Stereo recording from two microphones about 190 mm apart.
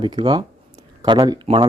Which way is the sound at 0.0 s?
25° right (ahead or behind).